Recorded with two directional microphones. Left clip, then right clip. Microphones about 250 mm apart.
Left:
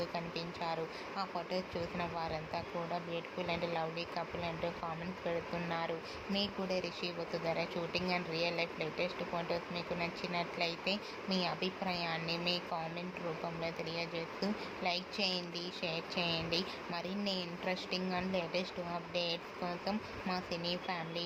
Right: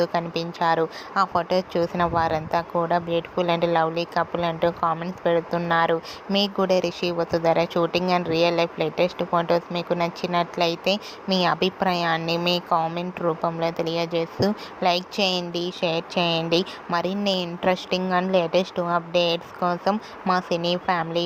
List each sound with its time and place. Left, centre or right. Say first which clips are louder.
0.0 s speech: right 16 dB; right